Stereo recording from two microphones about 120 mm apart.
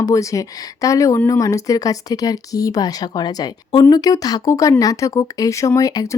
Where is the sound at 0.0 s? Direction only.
25° left (ahead or behind).